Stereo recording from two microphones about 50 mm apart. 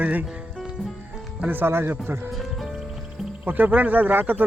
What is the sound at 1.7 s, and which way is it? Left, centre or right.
Speech, right.